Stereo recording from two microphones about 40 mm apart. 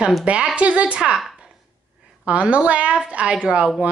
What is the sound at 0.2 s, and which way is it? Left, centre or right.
Speech, right.